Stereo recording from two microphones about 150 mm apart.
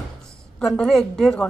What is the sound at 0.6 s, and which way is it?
Speech, 5° left (ahead or behind).